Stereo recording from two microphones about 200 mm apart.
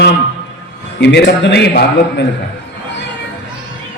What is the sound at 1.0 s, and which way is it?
A man's voice, 60° left (ahead or behind).